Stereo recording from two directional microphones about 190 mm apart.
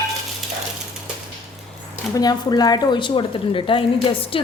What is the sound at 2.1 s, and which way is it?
Speech, 20° left (ahead or behind).